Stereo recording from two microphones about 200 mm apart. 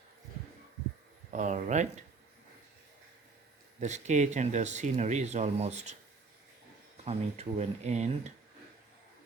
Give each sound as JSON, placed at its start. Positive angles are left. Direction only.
{"t": 1.3, "sound": "speech", "side_deg": -35}
{"t": 3.8, "sound": "speech", "side_deg": -35}
{"t": 7.0, "sound": "speech", "side_deg": -30}